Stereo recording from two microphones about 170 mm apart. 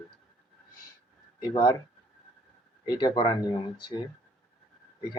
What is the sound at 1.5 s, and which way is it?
Speech, 25° left (ahead or behind).